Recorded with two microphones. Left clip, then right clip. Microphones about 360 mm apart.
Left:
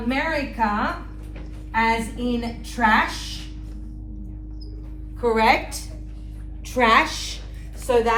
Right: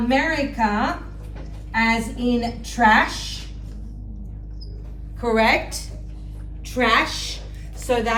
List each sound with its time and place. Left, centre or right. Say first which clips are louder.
0.1 s a woman's voice: right 3 dB; centre
5.2 s a woman's voice: even; centre